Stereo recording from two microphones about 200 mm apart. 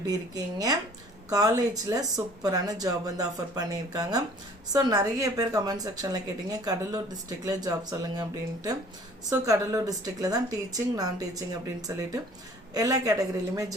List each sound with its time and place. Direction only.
0.0 s a woman's voice: 20° right (ahead or behind)
9.3 s a woman's voice: 15° right (ahead or behind)